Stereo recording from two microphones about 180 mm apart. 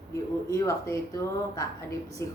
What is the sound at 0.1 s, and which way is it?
A woman's voice, 15° left (ahead or behind).